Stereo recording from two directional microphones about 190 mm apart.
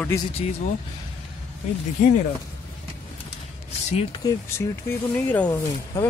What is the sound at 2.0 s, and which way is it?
Speech, 45° left (ahead or behind).